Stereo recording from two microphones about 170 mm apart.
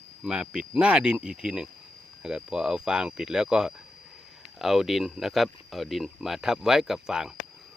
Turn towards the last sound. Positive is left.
turn(degrees=-5)  # may be behind; listen again after turning